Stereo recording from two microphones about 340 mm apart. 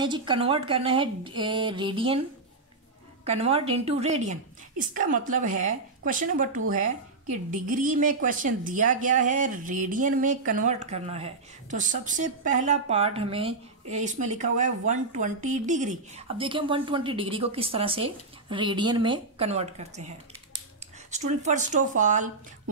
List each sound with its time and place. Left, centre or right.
0.0 s speech: centre
3.3 s a woman's voice: centre
21.1 s a woman's voice: right